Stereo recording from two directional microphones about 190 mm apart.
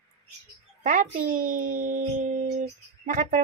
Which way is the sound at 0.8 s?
45° right (ahead or behind).